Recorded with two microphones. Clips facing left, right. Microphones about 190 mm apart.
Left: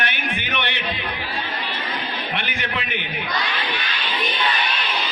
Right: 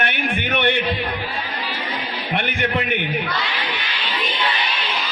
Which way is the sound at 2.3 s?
55° right (ahead or behind).